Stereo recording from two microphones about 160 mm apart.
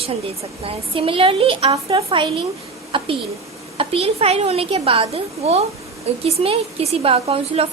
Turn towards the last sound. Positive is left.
turn(degrees=-35)  # may be behind; listen again after turning